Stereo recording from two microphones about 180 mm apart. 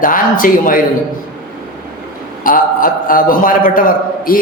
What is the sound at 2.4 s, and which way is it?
A man's voice, 50° left (ahead or behind).